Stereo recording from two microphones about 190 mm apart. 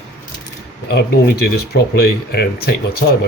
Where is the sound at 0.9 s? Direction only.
60° left (ahead or behind).